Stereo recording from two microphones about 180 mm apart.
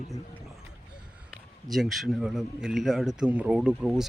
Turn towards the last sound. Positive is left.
turn(degrees=-5)  # may be behind; listen again after turning